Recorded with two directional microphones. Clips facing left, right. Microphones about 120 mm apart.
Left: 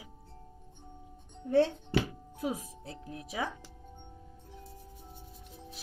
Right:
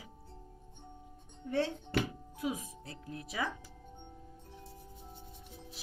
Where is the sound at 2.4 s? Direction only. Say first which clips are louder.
Left 2 dB; 30° left (ahead or behind).